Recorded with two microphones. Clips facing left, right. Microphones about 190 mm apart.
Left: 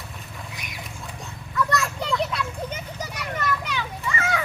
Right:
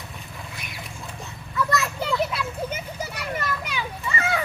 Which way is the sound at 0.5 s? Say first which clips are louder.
Even; 15° left (ahead or behind).